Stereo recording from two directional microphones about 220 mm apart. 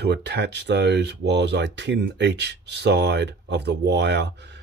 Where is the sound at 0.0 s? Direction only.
50° right (ahead or behind).